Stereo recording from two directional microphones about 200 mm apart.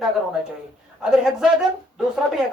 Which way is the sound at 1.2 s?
Centre (ahead or behind).